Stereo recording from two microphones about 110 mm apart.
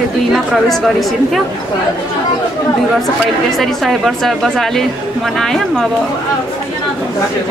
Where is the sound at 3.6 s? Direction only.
Centre (ahead or behind).